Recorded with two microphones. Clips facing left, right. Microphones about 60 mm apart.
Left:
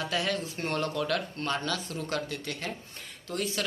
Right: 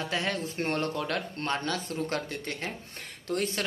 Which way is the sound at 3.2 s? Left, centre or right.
Right.